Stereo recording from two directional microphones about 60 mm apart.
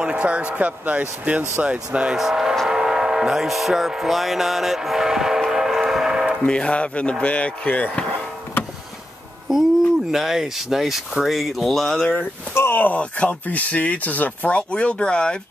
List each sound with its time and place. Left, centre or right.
0.0 s speech: centre
6.4 s speech: centre
10.1 s speech: centre
12.5 s speech: left; by 15.3 s centre